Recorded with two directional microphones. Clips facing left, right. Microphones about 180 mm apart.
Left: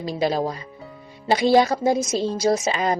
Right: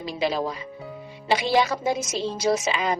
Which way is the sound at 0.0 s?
40° left (ahead or behind).